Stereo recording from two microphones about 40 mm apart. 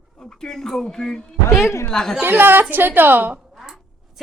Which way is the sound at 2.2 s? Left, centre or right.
Right.